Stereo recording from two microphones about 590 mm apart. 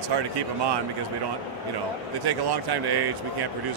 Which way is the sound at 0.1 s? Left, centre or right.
Right.